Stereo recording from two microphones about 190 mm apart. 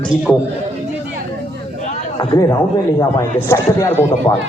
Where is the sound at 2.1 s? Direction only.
25° left (ahead or behind).